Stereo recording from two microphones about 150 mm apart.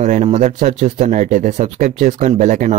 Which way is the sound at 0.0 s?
50° right (ahead or behind).